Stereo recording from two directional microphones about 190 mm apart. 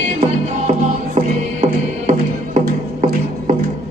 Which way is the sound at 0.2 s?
35° right (ahead or behind).